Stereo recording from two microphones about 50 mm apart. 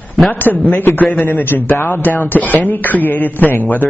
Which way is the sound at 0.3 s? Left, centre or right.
Left.